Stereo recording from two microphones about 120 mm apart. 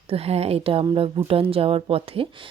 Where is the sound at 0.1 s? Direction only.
55° right (ahead or behind).